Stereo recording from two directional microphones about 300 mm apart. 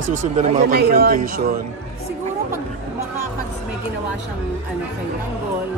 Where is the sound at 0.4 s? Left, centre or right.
Right.